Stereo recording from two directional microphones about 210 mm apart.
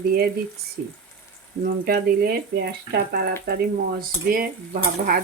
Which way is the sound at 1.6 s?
45° right (ahead or behind).